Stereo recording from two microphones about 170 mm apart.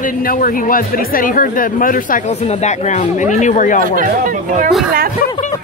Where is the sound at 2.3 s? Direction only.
40° left (ahead or behind).